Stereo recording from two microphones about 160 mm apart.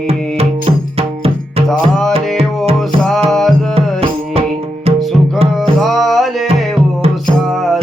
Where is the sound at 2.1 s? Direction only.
40° right (ahead or behind).